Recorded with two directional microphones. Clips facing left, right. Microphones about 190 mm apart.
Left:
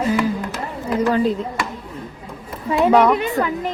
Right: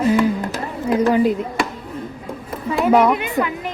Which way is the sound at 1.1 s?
15° right (ahead or behind).